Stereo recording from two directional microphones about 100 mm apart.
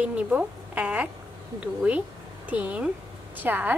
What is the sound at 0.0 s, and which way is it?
A woman's voice, 15° right (ahead or behind).